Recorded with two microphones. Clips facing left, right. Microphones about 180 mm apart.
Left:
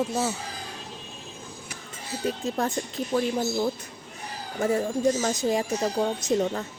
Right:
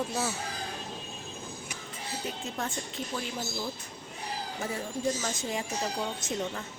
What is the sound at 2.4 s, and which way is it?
Speech, 40° left (ahead or behind).